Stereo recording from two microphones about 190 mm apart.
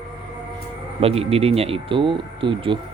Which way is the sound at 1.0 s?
30° right (ahead or behind).